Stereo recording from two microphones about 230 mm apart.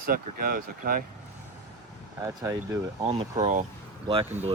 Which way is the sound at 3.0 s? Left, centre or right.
Right.